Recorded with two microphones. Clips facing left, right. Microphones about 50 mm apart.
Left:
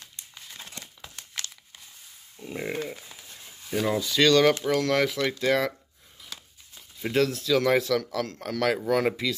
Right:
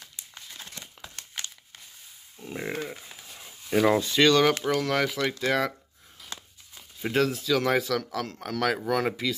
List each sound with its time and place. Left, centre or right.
2.4 s speech: centre
3.0 s a sound: centre
3.3 s a sound: centre
3.8 s speech: right
4.2 s speech: centre
7.0 s speech: centre